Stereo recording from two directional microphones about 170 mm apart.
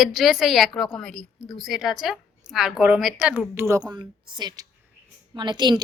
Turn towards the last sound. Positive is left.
turn(degrees=-25)  # may be behind; listen again after turning